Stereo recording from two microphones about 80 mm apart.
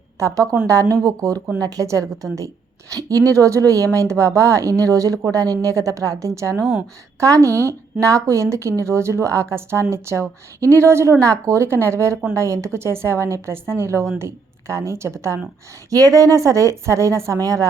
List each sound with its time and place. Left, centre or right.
0.2 s a woman's voice: right